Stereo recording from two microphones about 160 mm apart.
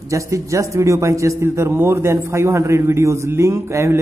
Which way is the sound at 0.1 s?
20° right (ahead or behind).